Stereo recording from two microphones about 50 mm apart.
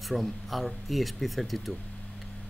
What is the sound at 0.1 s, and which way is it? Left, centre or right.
Speech, centre.